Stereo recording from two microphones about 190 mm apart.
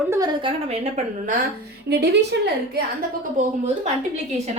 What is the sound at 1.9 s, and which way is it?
Speech, 60° right (ahead or behind).